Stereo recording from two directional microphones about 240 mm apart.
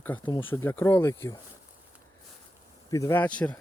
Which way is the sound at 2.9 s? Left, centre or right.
Centre.